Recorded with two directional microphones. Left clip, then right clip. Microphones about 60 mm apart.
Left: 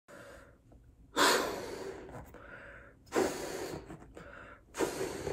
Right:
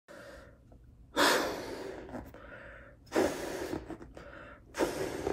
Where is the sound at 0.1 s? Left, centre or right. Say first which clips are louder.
Right 2 dB; right.